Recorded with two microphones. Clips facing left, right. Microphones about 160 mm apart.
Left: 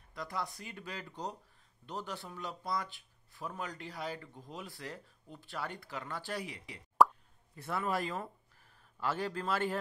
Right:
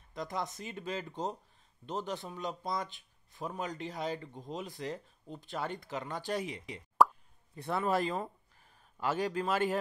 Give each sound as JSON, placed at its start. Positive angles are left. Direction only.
{"t": 0.1, "sound": "speech", "side_deg": -20}
{"t": 7.0, "sound": "plop", "side_deg": 0}
{"t": 7.5, "sound": "speech", "side_deg": -25}